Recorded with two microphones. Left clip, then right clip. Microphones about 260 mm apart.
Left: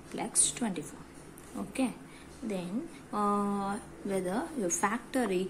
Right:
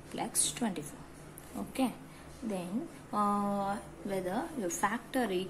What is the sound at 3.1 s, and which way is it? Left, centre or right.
A woman's voice, centre.